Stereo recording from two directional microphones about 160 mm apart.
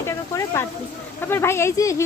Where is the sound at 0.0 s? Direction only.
15° left (ahead or behind).